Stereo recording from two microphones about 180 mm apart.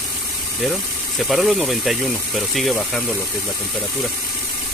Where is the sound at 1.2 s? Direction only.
Centre (ahead or behind).